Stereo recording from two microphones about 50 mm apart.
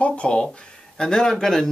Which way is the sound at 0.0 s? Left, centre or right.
Left.